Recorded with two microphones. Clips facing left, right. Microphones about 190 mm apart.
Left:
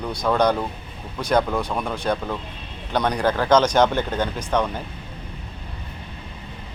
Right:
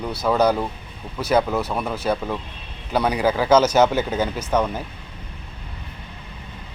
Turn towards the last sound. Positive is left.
turn(degrees=-5)  # may be behind; listen again after turning